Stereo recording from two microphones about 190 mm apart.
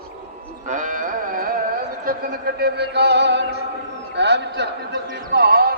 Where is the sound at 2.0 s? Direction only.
55° right (ahead or behind).